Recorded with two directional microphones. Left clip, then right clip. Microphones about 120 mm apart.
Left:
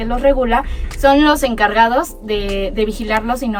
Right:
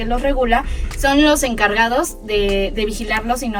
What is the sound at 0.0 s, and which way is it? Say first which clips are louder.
A woman's voice: left 4 dB; 25° left (ahead or behind).